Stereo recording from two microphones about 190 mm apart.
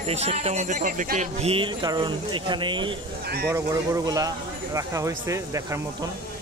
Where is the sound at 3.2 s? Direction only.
55° right (ahead or behind).